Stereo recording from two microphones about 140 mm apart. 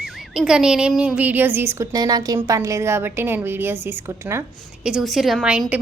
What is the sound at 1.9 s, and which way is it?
A woman's voice, 30° right (ahead or behind).